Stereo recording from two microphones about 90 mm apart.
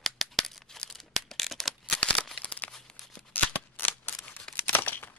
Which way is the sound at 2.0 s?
10° left (ahead or behind).